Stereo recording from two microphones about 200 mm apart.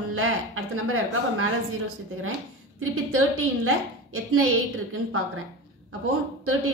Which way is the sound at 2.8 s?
90° right.